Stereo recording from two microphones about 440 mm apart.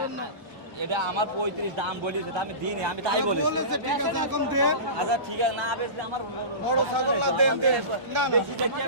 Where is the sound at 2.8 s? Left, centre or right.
Right.